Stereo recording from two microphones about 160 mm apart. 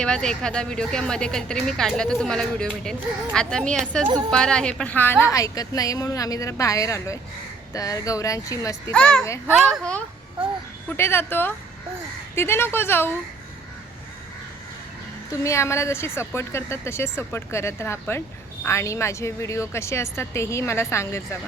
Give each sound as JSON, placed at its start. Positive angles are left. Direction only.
{"t": 0.0, "sound": "a woman's voice", "side_deg": 5}
{"t": 8.9, "sound": "a woman's voice", "side_deg": 5}
{"t": 15.3, "sound": "a woman's voice", "side_deg": 20}